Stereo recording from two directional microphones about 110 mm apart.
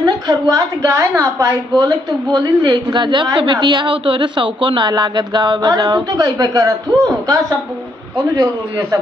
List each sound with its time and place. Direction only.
0.0 s a woman's voice: 35° right (ahead or behind)